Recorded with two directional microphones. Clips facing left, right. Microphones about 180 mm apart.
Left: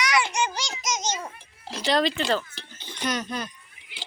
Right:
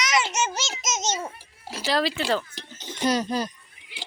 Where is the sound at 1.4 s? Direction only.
5° right (ahead or behind).